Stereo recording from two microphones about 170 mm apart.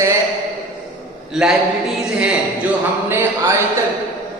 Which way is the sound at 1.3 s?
5° right (ahead or behind).